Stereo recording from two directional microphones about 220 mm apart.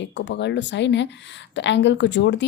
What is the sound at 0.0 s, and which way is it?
A woman's voice, 55° left (ahead or behind).